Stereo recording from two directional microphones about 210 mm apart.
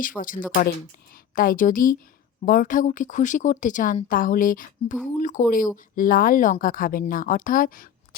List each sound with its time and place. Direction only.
0.2 s speech: 40° left (ahead or behind)